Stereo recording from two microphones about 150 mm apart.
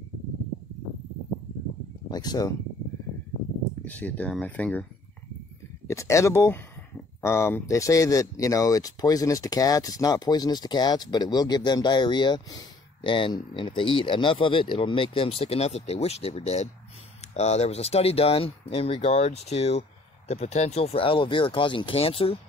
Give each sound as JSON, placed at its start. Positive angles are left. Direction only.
{"t": 2.0, "sound": "speech", "side_deg": 25}
{"t": 3.8, "sound": "speech", "side_deg": 10}
{"t": 5.9, "sound": "speech", "side_deg": 20}